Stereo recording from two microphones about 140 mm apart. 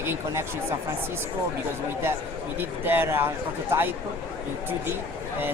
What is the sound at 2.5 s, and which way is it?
Speech, 15° right (ahead or behind).